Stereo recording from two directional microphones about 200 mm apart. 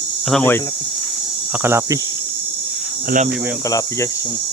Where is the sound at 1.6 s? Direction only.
15° right (ahead or behind).